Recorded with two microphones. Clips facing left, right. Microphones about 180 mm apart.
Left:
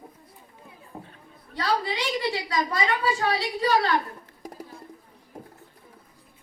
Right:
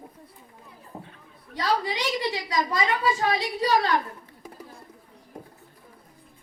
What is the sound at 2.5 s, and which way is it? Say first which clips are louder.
Speech: right 2 dB; 15° right (ahead or behind).